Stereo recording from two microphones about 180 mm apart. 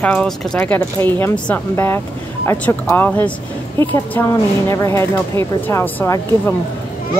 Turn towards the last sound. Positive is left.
turn(degrees=15)  # may be behind; listen again after turning